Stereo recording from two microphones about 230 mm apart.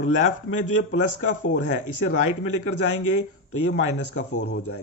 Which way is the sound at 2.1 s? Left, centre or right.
Left.